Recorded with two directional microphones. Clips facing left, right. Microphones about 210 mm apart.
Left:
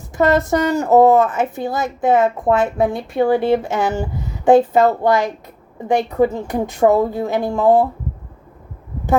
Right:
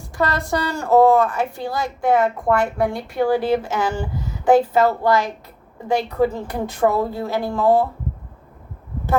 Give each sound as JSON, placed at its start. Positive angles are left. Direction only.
{"t": 0.2, "sound": "a woman's voice", "side_deg": 20}